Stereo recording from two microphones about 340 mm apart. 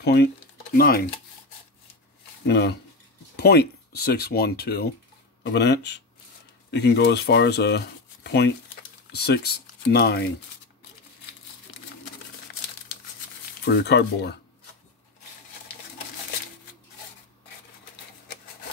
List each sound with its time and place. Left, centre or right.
0.0 s speech: left
2.4 s speech: left
13.7 s speech: left